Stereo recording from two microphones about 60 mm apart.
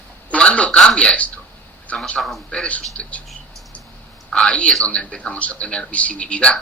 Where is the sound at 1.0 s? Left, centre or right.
Left.